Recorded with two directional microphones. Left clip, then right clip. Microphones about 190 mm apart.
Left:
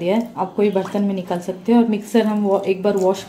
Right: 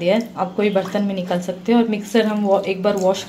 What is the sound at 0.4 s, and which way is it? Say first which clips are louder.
A woman's voice: even; 5° left (ahead or behind).